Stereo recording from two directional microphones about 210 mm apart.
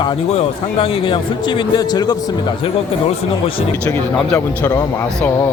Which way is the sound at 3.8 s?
5° left (ahead or behind).